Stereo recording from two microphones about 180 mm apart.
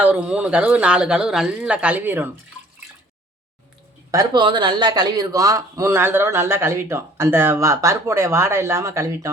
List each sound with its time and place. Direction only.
0.0 s speech: 5° right (ahead or behind)
4.1 s speech: 20° right (ahead or behind)